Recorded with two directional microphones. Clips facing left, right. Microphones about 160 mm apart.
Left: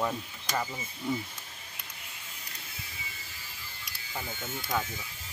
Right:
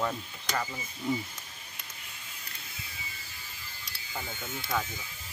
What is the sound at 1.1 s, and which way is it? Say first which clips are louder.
Speech: right 1 dB; centre (ahead or behind).